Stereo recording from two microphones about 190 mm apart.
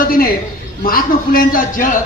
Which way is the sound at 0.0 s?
50° left (ahead or behind).